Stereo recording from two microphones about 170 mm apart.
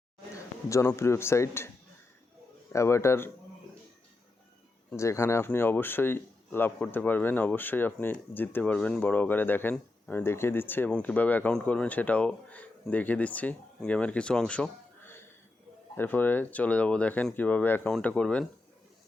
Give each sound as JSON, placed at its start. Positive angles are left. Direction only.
{"t": 0.7, "sound": "speech", "side_deg": 15}
{"t": 2.7, "sound": "speech", "side_deg": 15}
{"t": 4.9, "sound": "speech", "side_deg": 15}